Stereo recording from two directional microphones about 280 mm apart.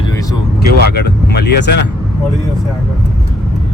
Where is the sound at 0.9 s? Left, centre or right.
Left.